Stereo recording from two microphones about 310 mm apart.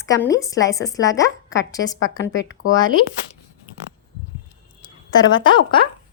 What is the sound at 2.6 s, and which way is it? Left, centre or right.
Speech, left.